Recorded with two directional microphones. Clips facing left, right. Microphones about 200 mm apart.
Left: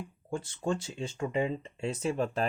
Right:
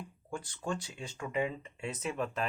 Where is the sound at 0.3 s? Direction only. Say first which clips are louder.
Left 5 dB; 25° left (ahead or behind).